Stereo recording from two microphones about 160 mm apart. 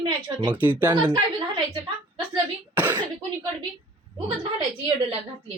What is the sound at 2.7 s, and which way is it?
Speech, 10° right (ahead or behind).